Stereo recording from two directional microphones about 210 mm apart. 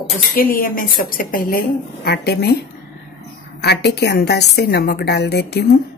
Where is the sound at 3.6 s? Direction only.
55° left (ahead or behind).